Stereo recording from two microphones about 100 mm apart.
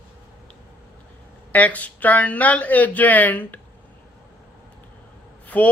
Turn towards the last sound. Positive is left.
turn(degrees=15)  # may be behind; listen again after turning